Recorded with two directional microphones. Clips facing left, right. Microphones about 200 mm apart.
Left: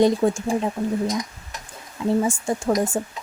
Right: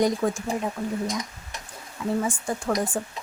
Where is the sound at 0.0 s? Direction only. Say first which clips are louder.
Left 5 dB; 25° left (ahead or behind).